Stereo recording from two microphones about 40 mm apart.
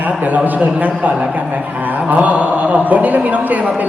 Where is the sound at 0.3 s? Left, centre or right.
Right.